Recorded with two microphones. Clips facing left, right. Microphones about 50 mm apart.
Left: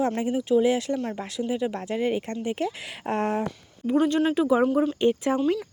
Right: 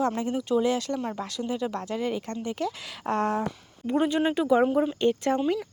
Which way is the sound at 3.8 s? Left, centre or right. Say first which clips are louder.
Left 2 dB; centre.